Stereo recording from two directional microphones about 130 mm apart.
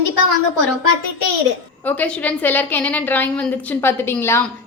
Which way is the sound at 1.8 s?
10° left (ahead or behind).